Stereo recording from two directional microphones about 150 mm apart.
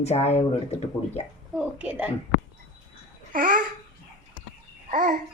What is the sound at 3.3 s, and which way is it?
Babbling, 65° right (ahead or behind).